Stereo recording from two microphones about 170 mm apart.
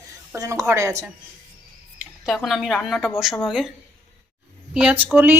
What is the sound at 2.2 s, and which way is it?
A woman's voice, centre (ahead or behind).